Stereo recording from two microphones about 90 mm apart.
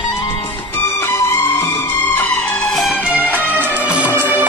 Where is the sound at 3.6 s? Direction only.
20° right (ahead or behind).